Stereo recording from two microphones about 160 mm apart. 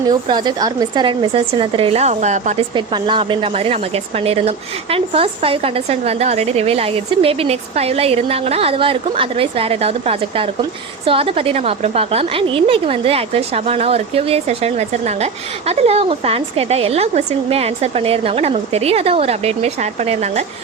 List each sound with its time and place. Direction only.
0.1 s a woman's voice: 25° right (ahead or behind); by 2.6 s 50° right (ahead or behind)
2.7 s a woman's voice: 30° right (ahead or behind)